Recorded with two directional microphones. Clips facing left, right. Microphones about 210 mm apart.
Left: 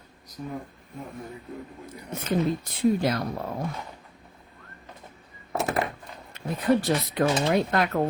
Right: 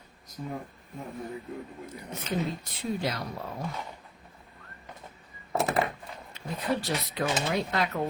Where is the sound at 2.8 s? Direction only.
55° left (ahead or behind).